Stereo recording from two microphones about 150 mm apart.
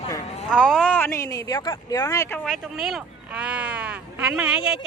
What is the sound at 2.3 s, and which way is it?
Speech, centre (ahead or behind).